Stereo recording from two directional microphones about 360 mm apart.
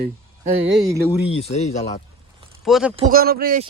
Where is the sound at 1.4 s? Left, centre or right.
Centre.